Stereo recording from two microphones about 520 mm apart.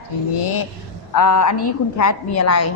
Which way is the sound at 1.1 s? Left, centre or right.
Left.